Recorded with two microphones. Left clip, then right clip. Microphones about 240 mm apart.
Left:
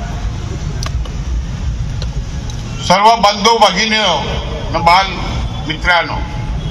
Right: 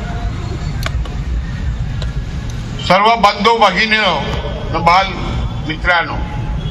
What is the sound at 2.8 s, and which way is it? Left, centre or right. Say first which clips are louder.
A man's voice: left 1 dB; left.